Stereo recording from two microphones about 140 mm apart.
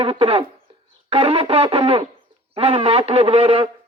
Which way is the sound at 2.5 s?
45° right (ahead or behind).